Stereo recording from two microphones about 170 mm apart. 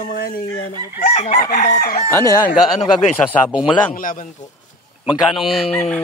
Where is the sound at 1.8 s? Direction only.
60° left (ahead or behind).